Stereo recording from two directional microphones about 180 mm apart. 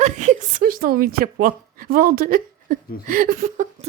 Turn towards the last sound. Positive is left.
turn(degrees=-50)  # may be behind; listen again after turning